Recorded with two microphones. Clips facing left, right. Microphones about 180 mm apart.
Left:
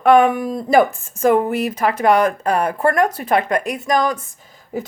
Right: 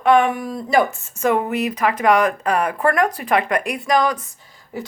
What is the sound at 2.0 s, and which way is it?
Speech, 35° left (ahead or behind).